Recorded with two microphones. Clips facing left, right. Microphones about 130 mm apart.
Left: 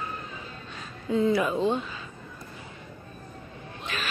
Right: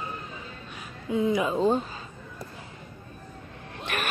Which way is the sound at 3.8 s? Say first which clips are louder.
Right 3 dB; 60° right (ahead or behind).